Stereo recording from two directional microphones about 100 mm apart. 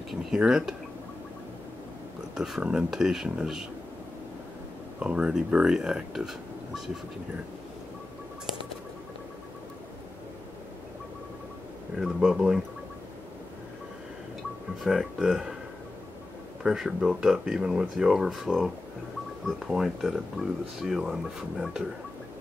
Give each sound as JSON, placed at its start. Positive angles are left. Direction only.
{"t": 0.1, "sound": "speech", "side_deg": -5}
{"t": 2.3, "sound": "speech", "side_deg": -5}
{"t": 5.0, "sound": "speech", "side_deg": -10}
{"t": 12.0, "sound": "speech", "side_deg": -5}
{"t": 14.8, "sound": "speech", "side_deg": -5}
{"t": 16.6, "sound": "speech", "side_deg": -5}